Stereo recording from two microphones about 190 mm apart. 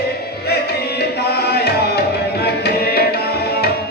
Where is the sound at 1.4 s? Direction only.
55° left (ahead or behind).